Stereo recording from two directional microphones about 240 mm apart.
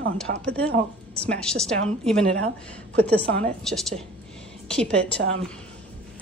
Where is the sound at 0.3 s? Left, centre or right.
Right.